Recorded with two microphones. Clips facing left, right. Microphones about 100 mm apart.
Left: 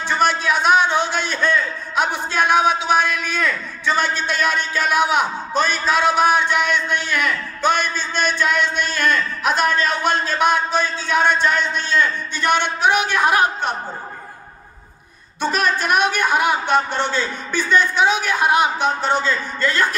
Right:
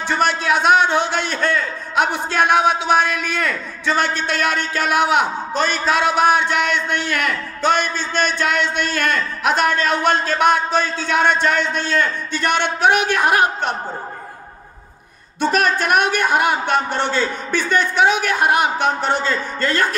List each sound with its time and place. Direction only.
0.1 s a man's voice: 70° right (ahead or behind)
15.5 s a man's voice: 55° right (ahead or behind)